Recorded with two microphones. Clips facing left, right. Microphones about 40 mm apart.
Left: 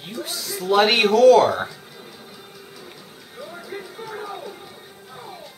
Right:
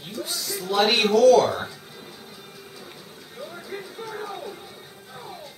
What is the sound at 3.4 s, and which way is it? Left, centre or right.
Music, centre.